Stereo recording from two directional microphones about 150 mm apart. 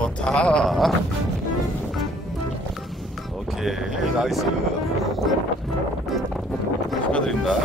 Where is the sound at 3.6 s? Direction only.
Centre (ahead or behind).